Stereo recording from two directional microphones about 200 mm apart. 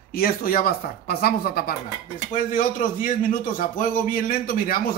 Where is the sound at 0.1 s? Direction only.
45° left (ahead or behind).